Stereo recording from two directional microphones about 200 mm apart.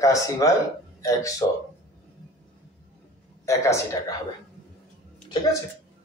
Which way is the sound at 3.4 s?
15° left (ahead or behind).